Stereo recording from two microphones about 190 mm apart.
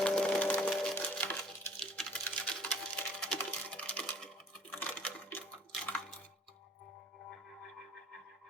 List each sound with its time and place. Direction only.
0.0 s splinter: 5° left (ahead or behind)
0.7 s wood: 5° left (ahead or behind)
4.8 s a sound: 5° left (ahead or behind)